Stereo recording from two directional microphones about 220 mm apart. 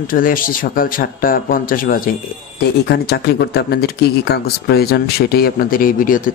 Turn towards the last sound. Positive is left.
turn(degrees=40)  # may be behind; listen again after turning